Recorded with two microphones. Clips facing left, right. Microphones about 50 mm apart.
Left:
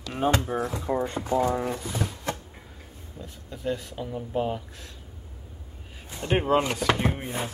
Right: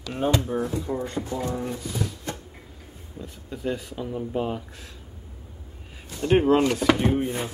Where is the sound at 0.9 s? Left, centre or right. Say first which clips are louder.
Left 2 dB; left.